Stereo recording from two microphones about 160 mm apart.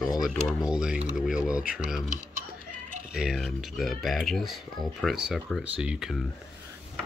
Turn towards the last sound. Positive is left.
turn(degrees=-5)  # may be behind; listen again after turning